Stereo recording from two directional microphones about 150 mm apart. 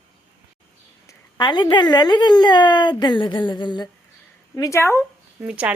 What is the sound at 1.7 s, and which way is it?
Speech, 30° left (ahead or behind).